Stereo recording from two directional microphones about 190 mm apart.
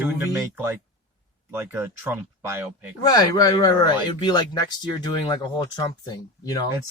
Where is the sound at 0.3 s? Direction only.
15° right (ahead or behind).